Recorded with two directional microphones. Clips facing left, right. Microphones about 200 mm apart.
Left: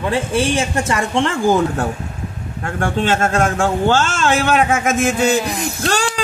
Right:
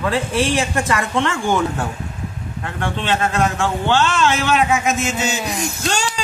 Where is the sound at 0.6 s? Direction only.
25° left (ahead or behind).